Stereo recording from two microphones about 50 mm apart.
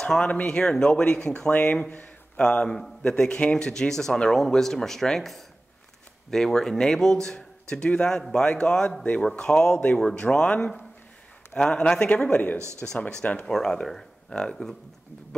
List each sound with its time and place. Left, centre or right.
0.2 s speech: left
1.5 s a man's voice: left; by 5.3 s centre
6.3 s a man's voice: centre; by 9.4 s left
9.4 s speech: centre
11.5 s a man's voice: centre
12.5 s speech: right
13.2 s a man's voice: left
13.5 s speech: centre